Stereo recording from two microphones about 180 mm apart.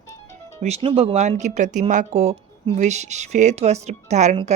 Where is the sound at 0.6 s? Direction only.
30° right (ahead or behind).